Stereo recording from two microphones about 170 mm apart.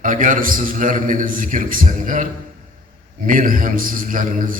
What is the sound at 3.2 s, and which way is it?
A man's voice, 55° right (ahead or behind).